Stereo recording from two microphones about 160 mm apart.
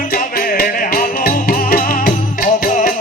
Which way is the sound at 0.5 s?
65° left (ahead or behind).